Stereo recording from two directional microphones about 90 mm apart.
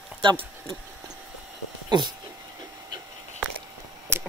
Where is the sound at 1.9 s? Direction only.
55° right (ahead or behind).